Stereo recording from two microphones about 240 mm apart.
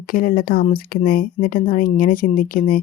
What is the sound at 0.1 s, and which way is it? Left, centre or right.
Speech, left.